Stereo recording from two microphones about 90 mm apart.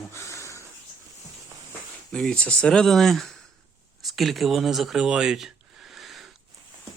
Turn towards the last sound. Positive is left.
turn(degrees=0)  # may be behind; listen again after turning